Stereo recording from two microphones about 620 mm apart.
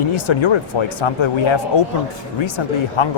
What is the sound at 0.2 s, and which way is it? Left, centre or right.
Speech, left.